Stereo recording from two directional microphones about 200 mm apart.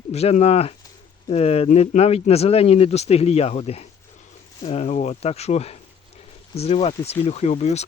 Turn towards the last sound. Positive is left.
turn(degrees=35)  # may be behind; listen again after turning